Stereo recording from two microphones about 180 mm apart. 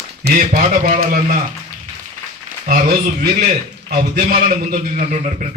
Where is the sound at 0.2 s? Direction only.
55° right (ahead or behind).